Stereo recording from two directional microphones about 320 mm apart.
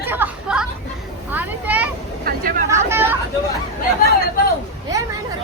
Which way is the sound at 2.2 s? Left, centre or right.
Right.